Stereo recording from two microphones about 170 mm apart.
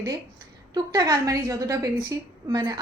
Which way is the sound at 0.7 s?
20° right (ahead or behind).